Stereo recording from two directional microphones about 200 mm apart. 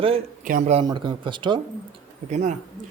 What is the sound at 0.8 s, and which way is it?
Speech, 20° right (ahead or behind).